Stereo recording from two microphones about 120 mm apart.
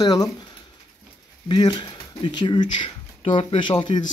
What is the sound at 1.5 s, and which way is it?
Speech, 35° left (ahead or behind).